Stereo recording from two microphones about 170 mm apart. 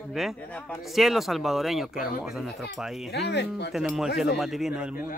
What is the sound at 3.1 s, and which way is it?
Speech, 85° left.